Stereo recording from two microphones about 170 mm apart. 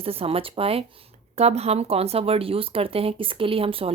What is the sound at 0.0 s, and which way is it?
Speech, 35° right (ahead or behind).